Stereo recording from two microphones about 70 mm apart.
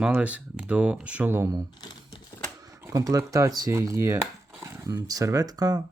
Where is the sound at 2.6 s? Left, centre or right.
Right.